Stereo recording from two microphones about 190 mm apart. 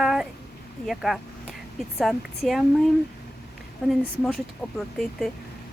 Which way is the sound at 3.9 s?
Centre (ahead or behind).